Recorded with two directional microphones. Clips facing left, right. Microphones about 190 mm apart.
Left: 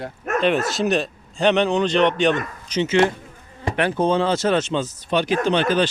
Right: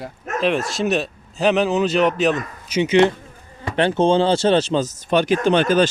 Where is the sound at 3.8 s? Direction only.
25° right (ahead or behind); by 5.8 s 45° right (ahead or behind).